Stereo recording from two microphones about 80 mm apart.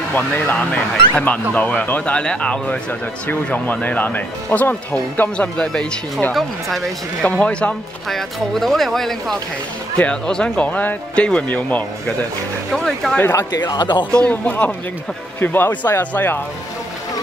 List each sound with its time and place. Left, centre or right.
0.1 s speech: left
7.2 s speech: centre
8.1 s speech: centre
12.7 s speech: centre
13.3 s speech: left
13.6 s speech: left
14.1 s speech: centre